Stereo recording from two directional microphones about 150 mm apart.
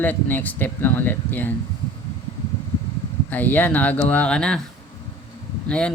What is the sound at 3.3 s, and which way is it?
Speech, 10° left (ahead or behind).